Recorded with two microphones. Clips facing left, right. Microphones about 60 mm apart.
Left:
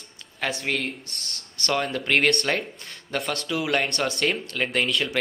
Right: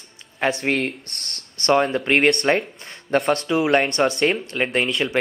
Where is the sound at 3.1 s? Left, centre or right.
Right.